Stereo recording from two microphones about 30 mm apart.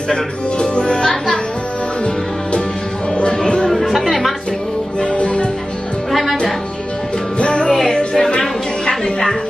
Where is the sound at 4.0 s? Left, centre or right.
Centre.